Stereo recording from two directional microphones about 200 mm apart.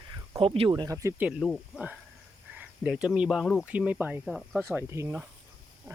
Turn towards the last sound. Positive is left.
turn(degrees=-10)  # may be behind; listen again after turning